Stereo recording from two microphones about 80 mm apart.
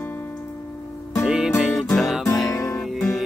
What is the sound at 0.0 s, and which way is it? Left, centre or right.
Music, left.